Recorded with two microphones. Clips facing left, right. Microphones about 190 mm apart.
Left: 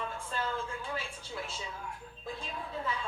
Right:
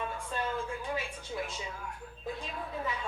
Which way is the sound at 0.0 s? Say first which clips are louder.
Right 1 dB; 15° right (ahead or behind).